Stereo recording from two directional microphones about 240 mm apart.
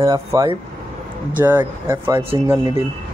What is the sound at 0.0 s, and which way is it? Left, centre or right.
Speech, centre.